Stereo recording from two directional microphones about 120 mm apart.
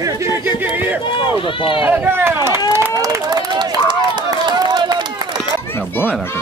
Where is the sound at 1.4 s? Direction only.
45° left (ahead or behind).